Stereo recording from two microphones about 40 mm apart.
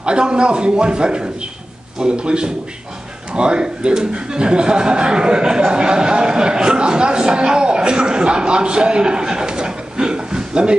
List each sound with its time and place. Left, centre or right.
0.0 s speech: right